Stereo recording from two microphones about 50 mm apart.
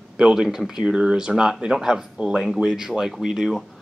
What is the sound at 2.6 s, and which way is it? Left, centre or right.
Speech, centre.